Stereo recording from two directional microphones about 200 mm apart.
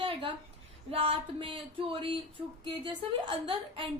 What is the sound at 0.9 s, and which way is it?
A woman's voice, 30° right (ahead or behind).